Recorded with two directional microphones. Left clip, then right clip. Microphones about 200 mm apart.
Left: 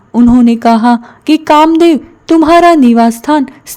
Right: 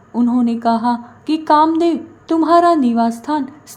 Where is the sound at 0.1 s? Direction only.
40° left (ahead or behind).